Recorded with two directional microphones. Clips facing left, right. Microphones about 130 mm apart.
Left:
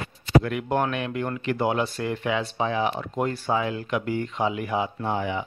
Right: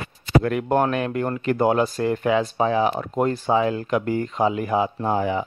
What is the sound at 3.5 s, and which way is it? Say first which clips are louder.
Speech: right 5 dB; 35° right (ahead or behind).